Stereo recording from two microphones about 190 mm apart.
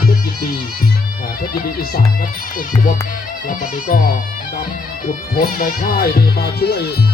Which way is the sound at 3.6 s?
45° left (ahead or behind).